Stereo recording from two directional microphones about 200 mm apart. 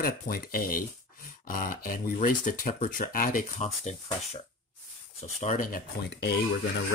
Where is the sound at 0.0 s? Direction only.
45° left (ahead or behind).